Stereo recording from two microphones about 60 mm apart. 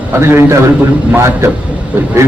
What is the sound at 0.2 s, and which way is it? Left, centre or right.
A man's voice, right.